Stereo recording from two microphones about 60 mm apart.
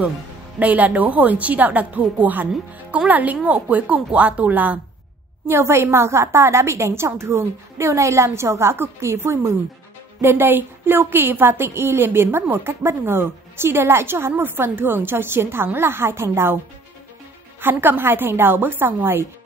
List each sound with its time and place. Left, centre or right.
0.6 s a woman's voice: right
5.5 s a woman's voice: right
10.2 s a woman's voice: right
17.6 s a woman's voice: right